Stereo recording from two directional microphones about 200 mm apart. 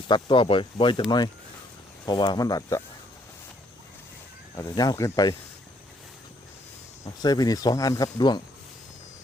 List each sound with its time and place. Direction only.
0.1 s speech: 25° left (ahead or behind)
2.0 s speech: 20° left (ahead or behind)
4.5 s speech: 20° left (ahead or behind)
7.2 s speech: 20° left (ahead or behind)